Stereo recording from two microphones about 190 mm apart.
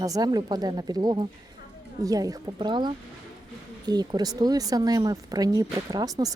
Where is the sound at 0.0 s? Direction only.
20° right (ahead or behind).